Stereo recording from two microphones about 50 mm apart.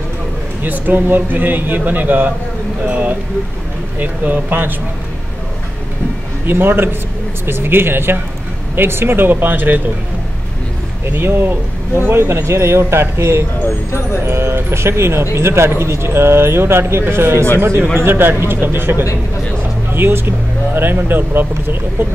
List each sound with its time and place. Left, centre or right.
0.6 s a man's voice: right
6.4 s speech: right
11.1 s speech: right
12.1 s speech: right
17.9 s speech: right